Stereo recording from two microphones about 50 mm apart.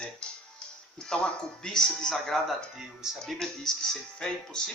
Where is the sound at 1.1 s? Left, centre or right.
Centre.